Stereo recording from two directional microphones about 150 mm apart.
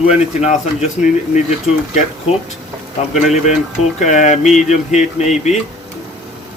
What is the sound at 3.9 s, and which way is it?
Speech, 55° left (ahead or behind).